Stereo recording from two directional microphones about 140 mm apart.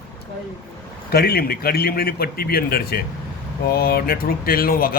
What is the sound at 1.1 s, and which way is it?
Speech, 90° left.